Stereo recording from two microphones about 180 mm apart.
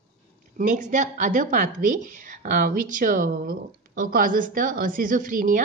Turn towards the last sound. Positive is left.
turn(degrees=-50)  # may be behind; listen again after turning